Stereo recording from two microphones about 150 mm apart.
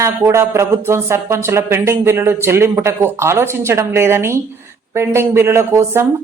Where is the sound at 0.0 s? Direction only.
20° right (ahead or behind).